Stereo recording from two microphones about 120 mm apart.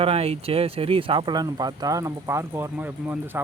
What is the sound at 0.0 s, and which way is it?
Speech, 55° right (ahead or behind).